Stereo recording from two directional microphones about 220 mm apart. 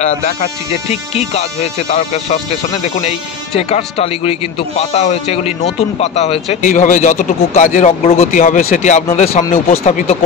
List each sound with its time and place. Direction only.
1.9 s a man's voice: 30° left (ahead or behind)